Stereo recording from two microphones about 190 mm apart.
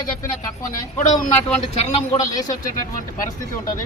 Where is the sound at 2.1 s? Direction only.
20° left (ahead or behind).